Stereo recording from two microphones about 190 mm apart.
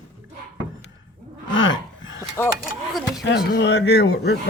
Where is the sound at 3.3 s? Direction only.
65° left (ahead or behind).